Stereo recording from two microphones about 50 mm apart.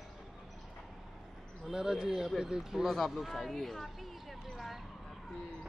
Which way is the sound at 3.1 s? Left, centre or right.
Centre.